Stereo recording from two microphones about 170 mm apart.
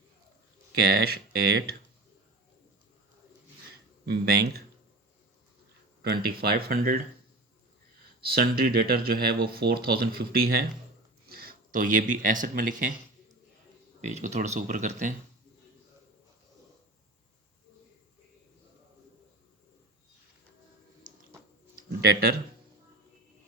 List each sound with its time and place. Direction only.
0.9 s speech: 70° right (ahead or behind)
4.0 s speech: 75° right (ahead or behind)
6.0 s speech: 60° right (ahead or behind)
8.4 s speech: 65° right (ahead or behind)
14.1 s speech: 45° right (ahead or behind)
21.8 s speech: 65° right (ahead or behind)